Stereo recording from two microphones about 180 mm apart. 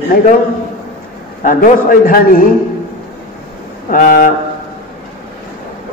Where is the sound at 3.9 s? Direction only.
50° left (ahead or behind).